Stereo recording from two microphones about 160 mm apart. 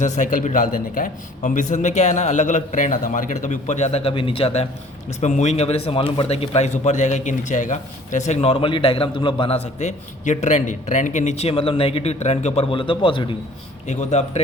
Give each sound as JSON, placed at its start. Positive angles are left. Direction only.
{"t": 0.0, "sound": "a man's voice", "side_deg": 50}
{"t": 9.8, "sound": "a man's voice", "side_deg": 50}
{"t": 12.7, "sound": "a man's voice", "side_deg": 30}
{"t": 13.8, "sound": "a man's voice", "side_deg": 45}